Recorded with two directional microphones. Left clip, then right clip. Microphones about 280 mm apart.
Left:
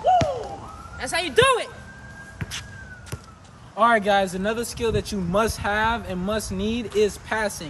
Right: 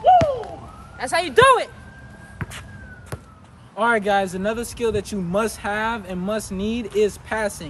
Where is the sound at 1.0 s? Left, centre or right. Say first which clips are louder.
Right 4 dB; centre.